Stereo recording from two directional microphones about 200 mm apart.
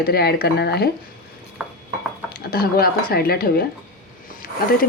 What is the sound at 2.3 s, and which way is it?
Dishes, 50° left (ahead or behind).